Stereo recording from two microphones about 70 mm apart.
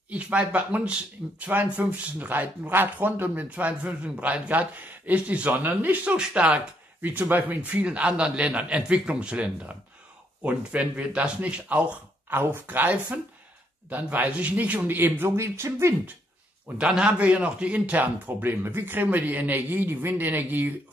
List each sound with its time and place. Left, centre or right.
0.1 s a man's voice: centre
12.3 s a man's voice: right
15.3 s speech: right
16.6 s a man's voice: centre